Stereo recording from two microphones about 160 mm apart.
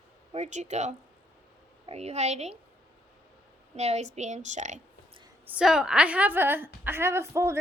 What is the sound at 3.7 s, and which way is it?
A woman's voice, 45° right (ahead or behind).